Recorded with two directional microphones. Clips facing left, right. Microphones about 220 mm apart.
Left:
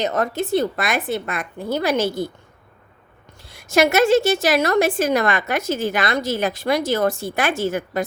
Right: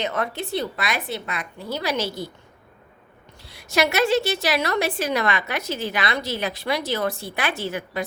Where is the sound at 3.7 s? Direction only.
45° left (ahead or behind).